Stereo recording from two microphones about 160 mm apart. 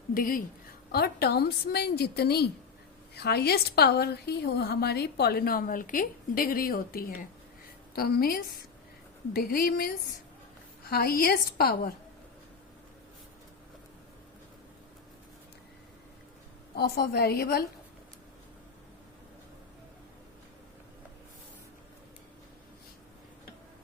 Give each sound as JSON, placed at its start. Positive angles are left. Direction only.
{"t": 0.1, "sound": "speech", "side_deg": 60}
{"t": 0.9, "sound": "a woman's voice", "side_deg": 80}
{"t": 16.7, "sound": "a woman's voice", "side_deg": 75}